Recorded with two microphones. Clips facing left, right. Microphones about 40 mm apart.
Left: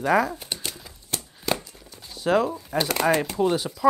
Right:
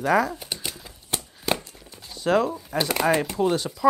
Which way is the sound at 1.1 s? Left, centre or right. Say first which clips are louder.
Right 2 dB; right.